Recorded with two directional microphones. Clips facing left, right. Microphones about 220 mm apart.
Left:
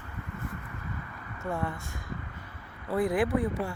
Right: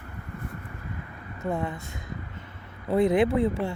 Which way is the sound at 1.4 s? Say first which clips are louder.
Right 3 dB; 20° right (ahead or behind).